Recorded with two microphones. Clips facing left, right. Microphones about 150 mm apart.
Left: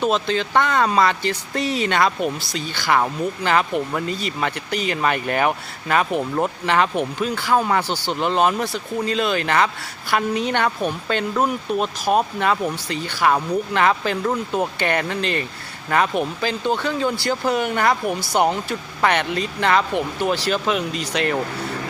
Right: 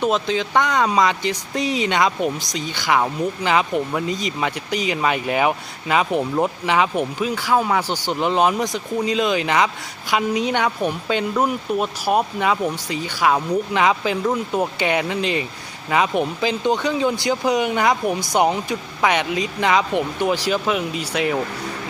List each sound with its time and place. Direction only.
0.0 s speech: 15° right (ahead or behind)
18.0 s speech: centre (ahead or behind)
18.3 s speech: 10° right (ahead or behind)